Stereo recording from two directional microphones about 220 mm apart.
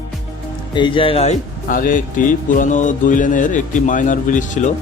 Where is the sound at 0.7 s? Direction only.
20° left (ahead or behind).